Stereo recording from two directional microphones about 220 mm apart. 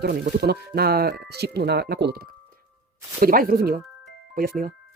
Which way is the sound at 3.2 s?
40° right (ahead or behind).